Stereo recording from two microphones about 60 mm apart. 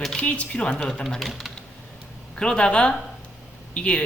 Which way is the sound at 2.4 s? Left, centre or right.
Centre.